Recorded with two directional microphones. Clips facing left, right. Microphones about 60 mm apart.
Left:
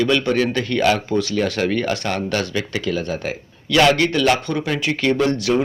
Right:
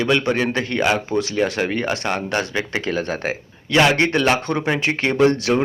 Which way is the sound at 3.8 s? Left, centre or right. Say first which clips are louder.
Left 1 dB; right.